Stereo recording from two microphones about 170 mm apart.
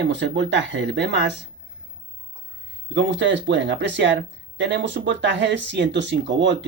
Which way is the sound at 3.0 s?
90° right.